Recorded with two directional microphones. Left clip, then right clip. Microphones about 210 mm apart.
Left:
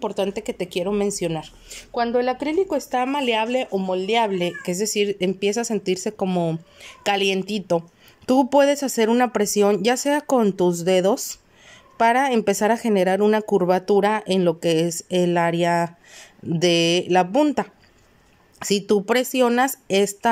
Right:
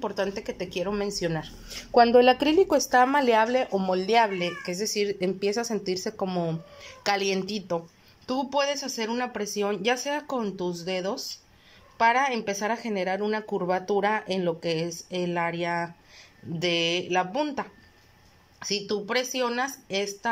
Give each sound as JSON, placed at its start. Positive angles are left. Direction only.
{"t": 0.0, "sound": "speech", "side_deg": 15}
{"t": 8.3, "sound": "speech", "side_deg": 35}